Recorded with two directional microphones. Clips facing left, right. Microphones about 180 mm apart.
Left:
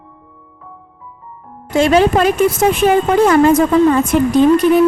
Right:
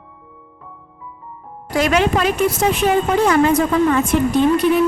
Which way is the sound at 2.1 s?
45° left (ahead or behind).